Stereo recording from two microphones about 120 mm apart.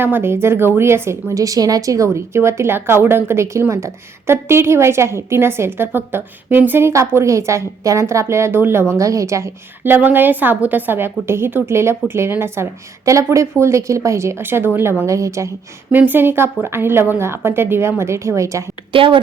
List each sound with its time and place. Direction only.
0.0 s speech: 20° right (ahead or behind)
15.9 s speech: 15° right (ahead or behind)
18.9 s speech: 45° right (ahead or behind)